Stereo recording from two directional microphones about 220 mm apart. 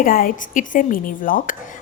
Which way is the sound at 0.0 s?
40° left (ahead or behind).